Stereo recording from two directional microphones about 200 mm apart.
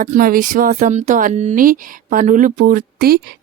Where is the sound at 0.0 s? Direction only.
45° right (ahead or behind).